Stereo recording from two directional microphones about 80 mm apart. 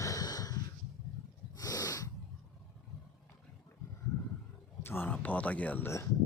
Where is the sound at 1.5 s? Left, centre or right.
Left.